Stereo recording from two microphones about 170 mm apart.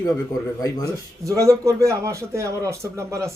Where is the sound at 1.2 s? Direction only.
20° right (ahead or behind).